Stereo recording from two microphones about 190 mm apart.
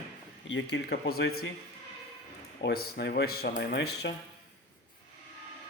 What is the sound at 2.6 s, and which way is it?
A man's voice, 60° left (ahead or behind).